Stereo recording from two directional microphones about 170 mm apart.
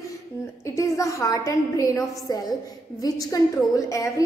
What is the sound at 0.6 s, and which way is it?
A woman's voice, 20° left (ahead or behind).